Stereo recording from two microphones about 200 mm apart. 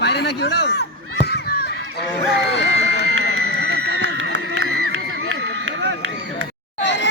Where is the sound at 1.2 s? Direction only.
55° left (ahead or behind).